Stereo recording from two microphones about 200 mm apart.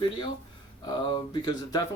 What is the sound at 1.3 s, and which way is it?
Speech, 20° left (ahead or behind).